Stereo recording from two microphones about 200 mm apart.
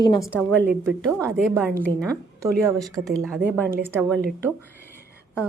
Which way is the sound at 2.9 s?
15° right (ahead or behind).